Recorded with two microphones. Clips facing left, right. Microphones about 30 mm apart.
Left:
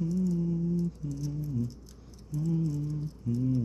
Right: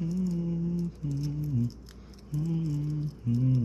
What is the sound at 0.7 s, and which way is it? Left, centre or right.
Mantra, right.